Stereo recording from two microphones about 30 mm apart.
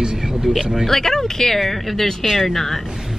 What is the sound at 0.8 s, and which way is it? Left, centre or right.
Speech, centre.